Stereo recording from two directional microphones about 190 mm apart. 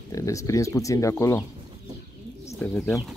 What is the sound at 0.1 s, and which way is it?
Speech, 15° left (ahead or behind).